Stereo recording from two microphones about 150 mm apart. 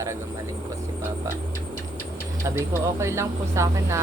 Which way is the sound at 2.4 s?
20° right (ahead or behind).